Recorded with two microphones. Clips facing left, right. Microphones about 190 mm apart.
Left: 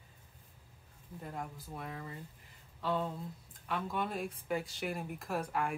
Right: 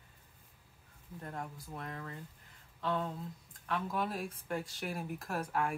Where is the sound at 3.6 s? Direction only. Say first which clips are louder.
Right 1 dB; centre (ahead or behind).